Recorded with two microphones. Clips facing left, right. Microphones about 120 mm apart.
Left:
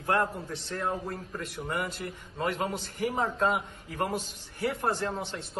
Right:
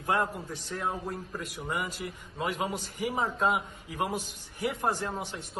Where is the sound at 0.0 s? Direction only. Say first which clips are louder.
Left 1 dB; 10° right (ahead or behind).